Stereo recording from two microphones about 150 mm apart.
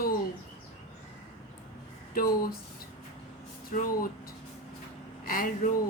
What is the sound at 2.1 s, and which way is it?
Speech, 75° left (ahead or behind).